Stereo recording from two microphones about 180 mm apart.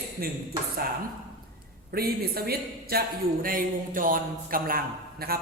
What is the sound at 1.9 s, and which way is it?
A man's voice, 55° right (ahead or behind).